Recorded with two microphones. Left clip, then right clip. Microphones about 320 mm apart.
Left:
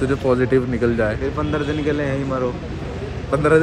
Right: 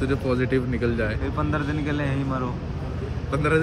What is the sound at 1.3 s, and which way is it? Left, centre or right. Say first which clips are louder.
Speech: left 4 dB; centre.